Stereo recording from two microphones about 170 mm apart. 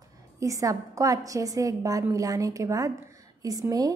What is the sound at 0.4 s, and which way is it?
A woman's voice, 20° right (ahead or behind).